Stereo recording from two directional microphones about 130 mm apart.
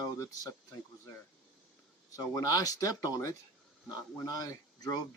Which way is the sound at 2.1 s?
25° left (ahead or behind).